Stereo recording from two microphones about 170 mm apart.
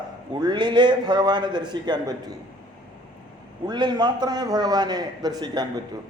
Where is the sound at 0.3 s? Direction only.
25° right (ahead or behind).